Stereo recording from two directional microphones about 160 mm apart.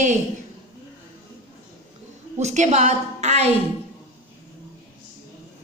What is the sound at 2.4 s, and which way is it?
A woman's voice, 45° right (ahead or behind).